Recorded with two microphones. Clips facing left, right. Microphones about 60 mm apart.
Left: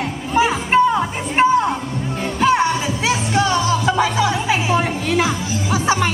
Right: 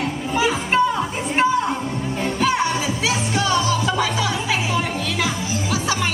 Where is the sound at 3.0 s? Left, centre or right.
Left.